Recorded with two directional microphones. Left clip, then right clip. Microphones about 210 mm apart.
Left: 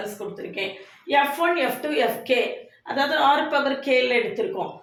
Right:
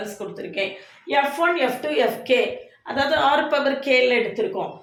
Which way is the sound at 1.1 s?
30° right (ahead or behind).